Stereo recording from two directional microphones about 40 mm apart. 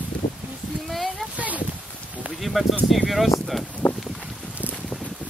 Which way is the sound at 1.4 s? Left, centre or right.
Right.